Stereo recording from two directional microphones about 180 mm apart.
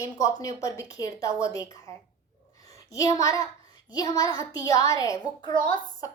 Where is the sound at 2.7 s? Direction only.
20° left (ahead or behind).